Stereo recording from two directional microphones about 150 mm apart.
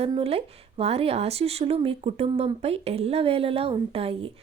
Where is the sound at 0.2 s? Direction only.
40° right (ahead or behind).